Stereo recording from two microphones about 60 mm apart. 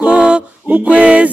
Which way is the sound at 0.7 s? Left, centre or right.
Centre.